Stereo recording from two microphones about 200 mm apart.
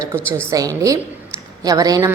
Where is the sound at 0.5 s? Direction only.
15° right (ahead or behind).